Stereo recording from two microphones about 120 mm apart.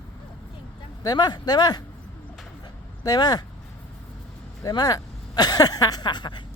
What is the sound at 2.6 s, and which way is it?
Dog, 35° left (ahead or behind).